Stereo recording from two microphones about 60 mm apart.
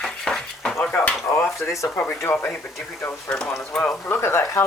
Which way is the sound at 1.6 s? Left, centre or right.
Left.